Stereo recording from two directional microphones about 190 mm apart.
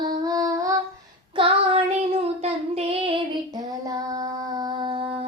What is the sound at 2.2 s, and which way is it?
Child singing, 35° right (ahead or behind).